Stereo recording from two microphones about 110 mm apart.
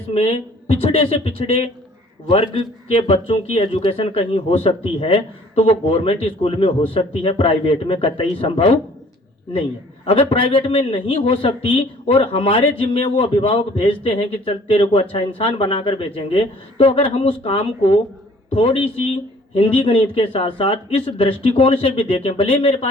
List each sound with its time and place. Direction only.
0.1 s speech: 70° left (ahead or behind)
10.1 s speech: 55° left (ahead or behind)